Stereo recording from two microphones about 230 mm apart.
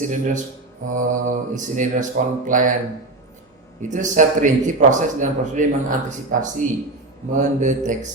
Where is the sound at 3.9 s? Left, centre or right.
Right.